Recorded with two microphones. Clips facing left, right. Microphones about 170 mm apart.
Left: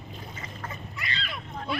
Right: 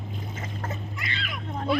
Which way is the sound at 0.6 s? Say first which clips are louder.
Right 4 dB; 45° right (ahead or behind).